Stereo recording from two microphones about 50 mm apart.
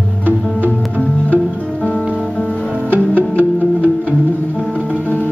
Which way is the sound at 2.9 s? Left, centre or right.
Right.